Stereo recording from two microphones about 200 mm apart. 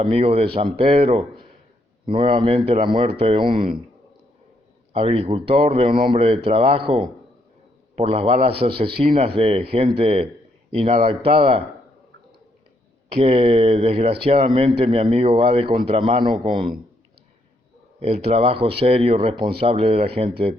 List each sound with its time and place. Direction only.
0.0 s speech: 30° right (ahead or behind)
4.9 s speech: 30° right (ahead or behind)
13.1 s speech: 30° right (ahead or behind)
18.0 s speech: 30° right (ahead or behind)